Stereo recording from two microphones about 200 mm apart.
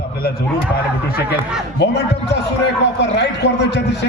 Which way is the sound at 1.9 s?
55° left (ahead or behind).